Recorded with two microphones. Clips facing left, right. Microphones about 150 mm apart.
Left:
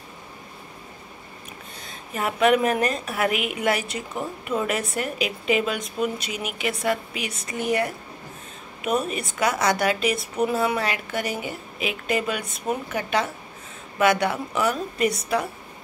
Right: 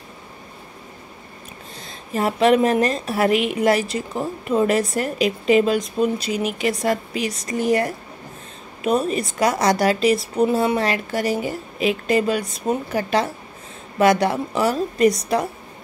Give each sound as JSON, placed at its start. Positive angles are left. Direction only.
{"t": 2.1, "sound": "a woman's voice", "side_deg": -30}